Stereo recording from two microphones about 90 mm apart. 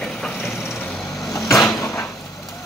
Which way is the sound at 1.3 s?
40° left (ahead or behind).